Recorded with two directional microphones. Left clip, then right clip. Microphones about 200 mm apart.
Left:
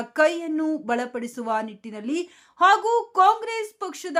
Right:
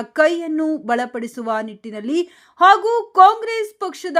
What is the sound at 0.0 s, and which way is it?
A woman's voice, 15° right (ahead or behind).